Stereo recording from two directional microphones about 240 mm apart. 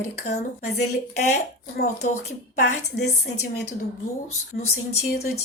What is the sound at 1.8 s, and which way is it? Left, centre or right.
Speech, left.